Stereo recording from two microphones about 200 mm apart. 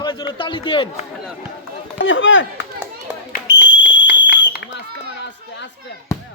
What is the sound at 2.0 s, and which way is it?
Speech, 70° left (ahead or behind).